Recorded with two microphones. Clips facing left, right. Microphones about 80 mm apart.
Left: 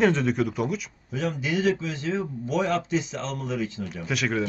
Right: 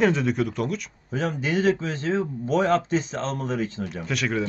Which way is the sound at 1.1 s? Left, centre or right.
Right.